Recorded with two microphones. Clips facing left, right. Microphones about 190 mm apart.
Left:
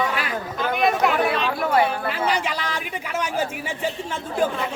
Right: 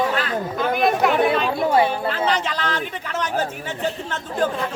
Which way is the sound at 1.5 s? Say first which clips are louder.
Even; 25° right (ahead or behind).